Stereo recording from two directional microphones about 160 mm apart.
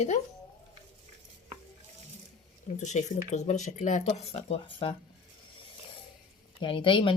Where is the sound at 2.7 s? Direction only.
50° left (ahead or behind); by 4.9 s 35° left (ahead or behind).